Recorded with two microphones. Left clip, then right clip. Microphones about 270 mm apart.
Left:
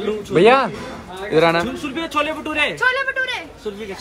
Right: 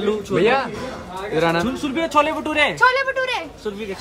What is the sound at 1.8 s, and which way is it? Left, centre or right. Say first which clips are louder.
Speech: right 3 dB; right.